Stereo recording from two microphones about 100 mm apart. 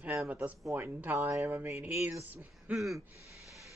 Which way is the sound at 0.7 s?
25° right (ahead or behind).